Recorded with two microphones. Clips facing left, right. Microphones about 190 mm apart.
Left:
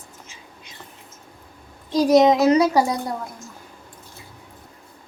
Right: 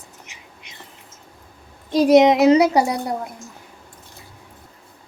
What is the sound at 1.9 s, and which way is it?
A woman's voice, 20° right (ahead or behind).